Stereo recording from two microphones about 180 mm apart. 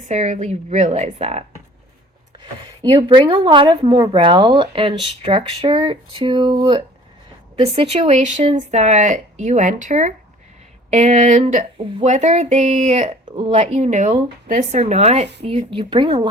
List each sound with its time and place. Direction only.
0.1 s a woman's voice: 40° right (ahead or behind)